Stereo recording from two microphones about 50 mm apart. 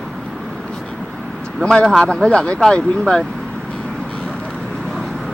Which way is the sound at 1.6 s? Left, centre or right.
Centre.